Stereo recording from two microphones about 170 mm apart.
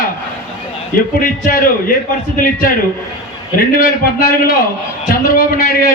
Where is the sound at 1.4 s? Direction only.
55° left (ahead or behind).